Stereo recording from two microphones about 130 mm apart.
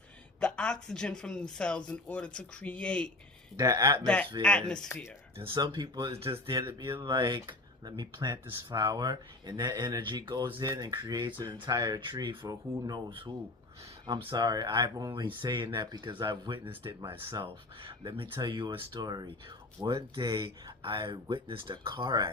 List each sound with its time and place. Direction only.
0.3 s speech: 10° left (ahead or behind)
3.6 s speech: 30° right (ahead or behind)
4.0 s speech: 10° left (ahead or behind)
5.4 s speech: 40° right (ahead or behind)
6.1 s speech: 45° right (ahead or behind)
6.7 s speech: 35° right (ahead or behind)
10.7 s speech: 25° right (ahead or behind)